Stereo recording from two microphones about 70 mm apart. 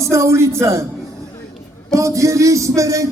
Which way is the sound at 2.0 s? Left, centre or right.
Right.